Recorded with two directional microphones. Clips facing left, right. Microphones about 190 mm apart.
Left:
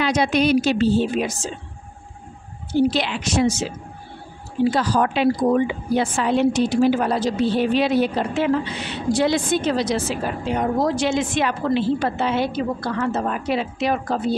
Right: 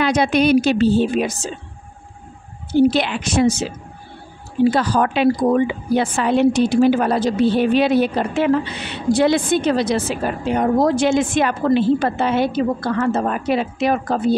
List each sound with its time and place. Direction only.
0.0 s a woman's voice: 55° right (ahead or behind)
2.7 s a woman's voice: 55° right (ahead or behind)
4.6 s a woman's voice: 60° right (ahead or behind)